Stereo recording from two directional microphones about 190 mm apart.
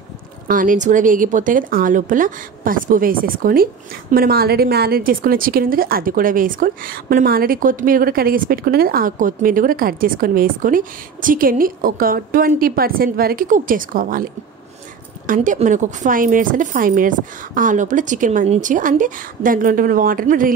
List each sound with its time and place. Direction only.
0.5 s a woman's voice: 45° right (ahead or behind)